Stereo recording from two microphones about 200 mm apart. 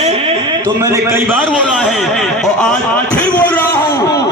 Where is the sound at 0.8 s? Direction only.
15° right (ahead or behind).